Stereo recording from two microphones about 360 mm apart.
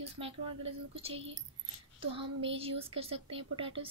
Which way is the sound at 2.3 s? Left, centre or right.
Centre.